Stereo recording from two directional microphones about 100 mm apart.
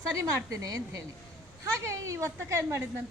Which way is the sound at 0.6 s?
35° right (ahead or behind).